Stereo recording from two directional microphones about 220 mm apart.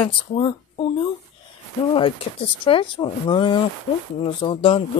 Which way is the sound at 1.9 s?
25° left (ahead or behind).